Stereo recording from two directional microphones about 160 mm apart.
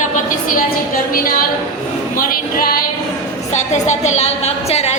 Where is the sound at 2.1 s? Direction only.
65° left (ahead or behind).